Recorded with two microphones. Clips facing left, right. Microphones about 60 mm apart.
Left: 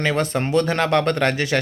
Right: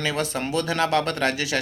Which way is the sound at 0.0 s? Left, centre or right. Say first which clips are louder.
Left 5 dB; left.